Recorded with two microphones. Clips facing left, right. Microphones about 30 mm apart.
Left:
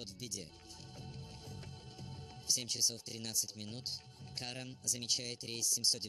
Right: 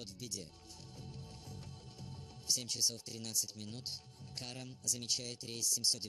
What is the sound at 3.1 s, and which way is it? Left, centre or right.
Speech, left.